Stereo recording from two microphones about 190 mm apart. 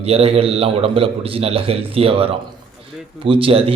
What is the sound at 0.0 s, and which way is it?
A man's voice, 30° right (ahead or behind).